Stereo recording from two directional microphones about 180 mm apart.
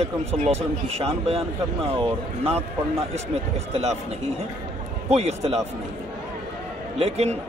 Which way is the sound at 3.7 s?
40° right (ahead or behind).